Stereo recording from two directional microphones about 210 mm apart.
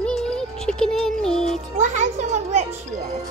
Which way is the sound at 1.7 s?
35° right (ahead or behind).